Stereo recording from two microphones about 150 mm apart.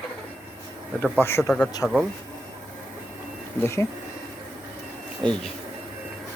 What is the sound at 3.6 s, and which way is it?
Speech, 20° left (ahead or behind).